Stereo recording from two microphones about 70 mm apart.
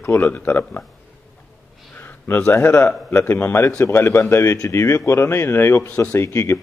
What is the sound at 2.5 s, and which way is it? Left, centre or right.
Speech, left.